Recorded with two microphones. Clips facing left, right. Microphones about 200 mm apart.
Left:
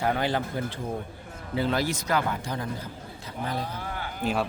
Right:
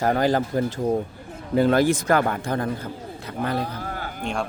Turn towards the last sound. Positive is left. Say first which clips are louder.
# even
turn(degrees=5)  # may be behind; listen again after turning